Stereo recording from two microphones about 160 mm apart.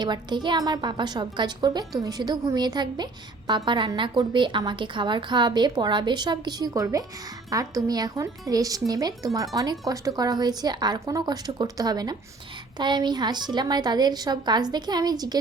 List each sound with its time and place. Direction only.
0.0 s a woman's voice: 25° right (ahead or behind)